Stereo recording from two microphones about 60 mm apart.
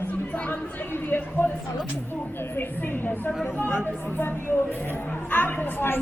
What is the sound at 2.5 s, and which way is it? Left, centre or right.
Speech, left.